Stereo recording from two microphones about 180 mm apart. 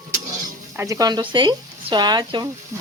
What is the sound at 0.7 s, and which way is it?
Speech, 15° right (ahead or behind).